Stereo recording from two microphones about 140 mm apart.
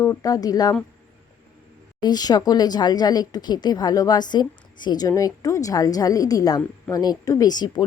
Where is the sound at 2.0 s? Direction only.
30° left (ahead or behind).